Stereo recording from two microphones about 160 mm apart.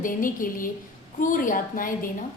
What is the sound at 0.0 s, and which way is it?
A woman's voice, 60° left (ahead or behind).